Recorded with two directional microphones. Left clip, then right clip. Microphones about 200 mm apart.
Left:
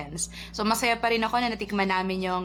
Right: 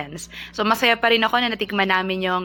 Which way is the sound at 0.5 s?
10° right (ahead or behind).